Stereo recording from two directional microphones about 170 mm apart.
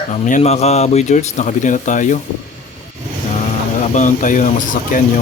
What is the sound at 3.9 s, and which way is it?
Speech, 50° left (ahead or behind).